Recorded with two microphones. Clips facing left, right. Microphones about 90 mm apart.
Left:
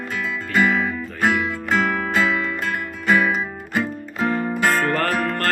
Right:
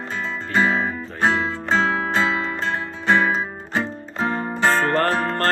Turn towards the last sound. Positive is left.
turn(degrees=-30)  # may be behind; listen again after turning